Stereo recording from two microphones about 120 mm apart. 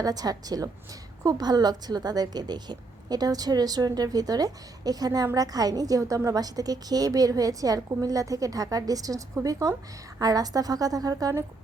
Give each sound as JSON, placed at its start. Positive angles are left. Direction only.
{"t": 0.0, "sound": "a woman's voice", "side_deg": -30}